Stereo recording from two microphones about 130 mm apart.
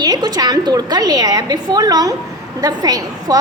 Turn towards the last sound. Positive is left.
turn(degrees=-30)  # may be behind; listen again after turning